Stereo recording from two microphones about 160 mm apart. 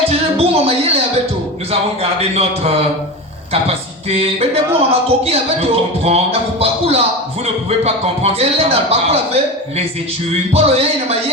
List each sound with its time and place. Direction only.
0.1 s a sound: 40° right (ahead or behind)
2.0 s a man's voice: 40° right (ahead or behind)
4.2 s a man's voice: 40° right (ahead or behind)